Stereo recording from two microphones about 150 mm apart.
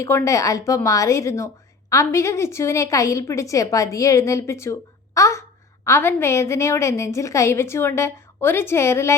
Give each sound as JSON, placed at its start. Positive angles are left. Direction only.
{"t": 0.0, "sound": "a woman's voice", "side_deg": 20}